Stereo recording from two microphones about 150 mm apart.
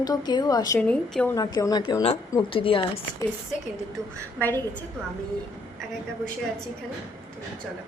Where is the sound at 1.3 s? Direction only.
25° left (ahead or behind).